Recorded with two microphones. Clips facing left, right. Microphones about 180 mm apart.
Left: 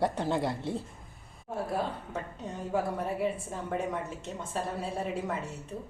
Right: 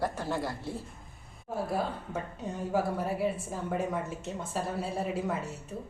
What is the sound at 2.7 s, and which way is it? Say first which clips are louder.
A woman's voice: even; 5° right (ahead or behind).